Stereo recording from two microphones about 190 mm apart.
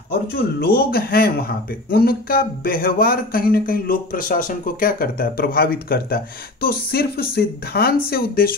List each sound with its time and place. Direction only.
0.1 s speech: 55° left (ahead or behind)